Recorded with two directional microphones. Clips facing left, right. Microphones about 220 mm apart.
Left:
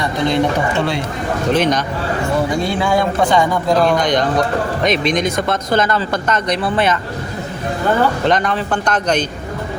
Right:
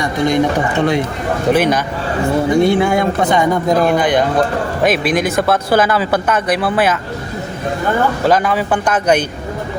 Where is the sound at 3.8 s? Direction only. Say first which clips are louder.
Right 2 dB; 5° right (ahead or behind).